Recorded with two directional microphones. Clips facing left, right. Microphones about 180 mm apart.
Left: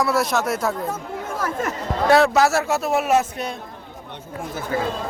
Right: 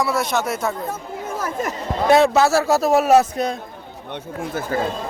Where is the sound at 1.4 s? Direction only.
15° right (ahead or behind); by 3.5 s 40° right (ahead or behind).